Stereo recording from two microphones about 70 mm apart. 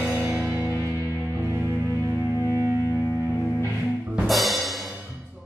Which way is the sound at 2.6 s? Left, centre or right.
Right.